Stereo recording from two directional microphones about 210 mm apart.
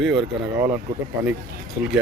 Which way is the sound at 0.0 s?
Centre (ahead or behind).